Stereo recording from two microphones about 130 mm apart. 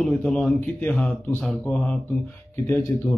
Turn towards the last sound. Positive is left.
turn(degrees=20)  # may be behind; listen again after turning